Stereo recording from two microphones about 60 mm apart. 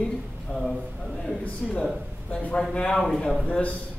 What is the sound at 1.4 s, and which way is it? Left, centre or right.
Speech, centre.